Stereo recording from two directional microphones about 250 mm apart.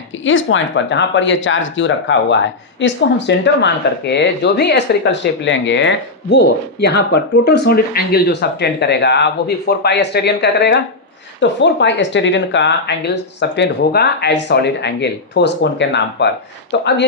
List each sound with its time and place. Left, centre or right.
0.3 s speech: left